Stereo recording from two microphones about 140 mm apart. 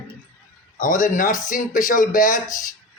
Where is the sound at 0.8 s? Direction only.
70° left (ahead or behind).